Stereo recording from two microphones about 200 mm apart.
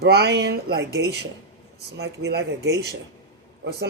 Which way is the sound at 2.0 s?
55° right (ahead or behind).